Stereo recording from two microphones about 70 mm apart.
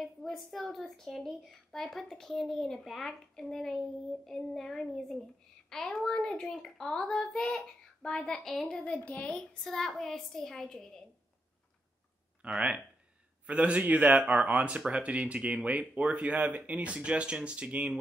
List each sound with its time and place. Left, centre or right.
0.0 s a woman's voice: centre
8.8 s a child's voice: centre
12.4 s speech: centre